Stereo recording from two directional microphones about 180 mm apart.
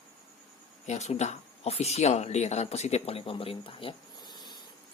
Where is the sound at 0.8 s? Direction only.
40° left (ahead or behind).